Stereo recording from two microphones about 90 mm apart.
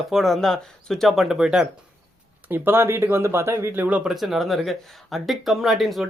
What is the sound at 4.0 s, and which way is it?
A woman's voice, 5° right (ahead or behind).